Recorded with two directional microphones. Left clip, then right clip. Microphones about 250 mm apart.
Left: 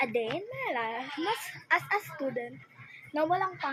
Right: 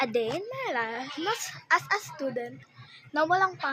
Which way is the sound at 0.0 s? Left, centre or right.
Centre.